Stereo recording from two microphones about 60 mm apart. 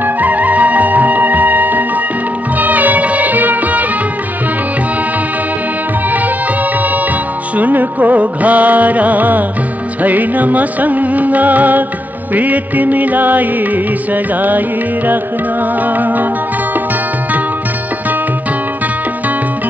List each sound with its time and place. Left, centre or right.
0.0 s music: right
6.0 s music: right
15.6 s music: right